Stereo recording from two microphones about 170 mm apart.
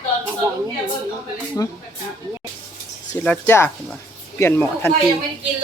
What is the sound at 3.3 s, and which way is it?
Speech, 15° left (ahead or behind).